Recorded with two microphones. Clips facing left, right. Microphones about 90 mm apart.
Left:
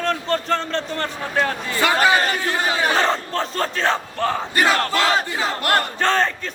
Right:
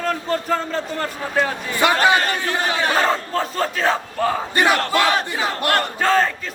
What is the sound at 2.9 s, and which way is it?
Speech, 5° right (ahead or behind).